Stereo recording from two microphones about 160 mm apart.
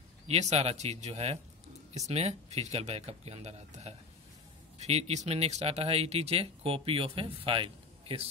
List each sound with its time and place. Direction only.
0.3 s speech: 45° right (ahead or behind)